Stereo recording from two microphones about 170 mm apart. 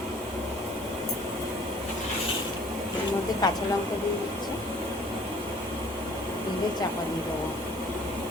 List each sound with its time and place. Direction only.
3.4 s speech: 25° left (ahead or behind)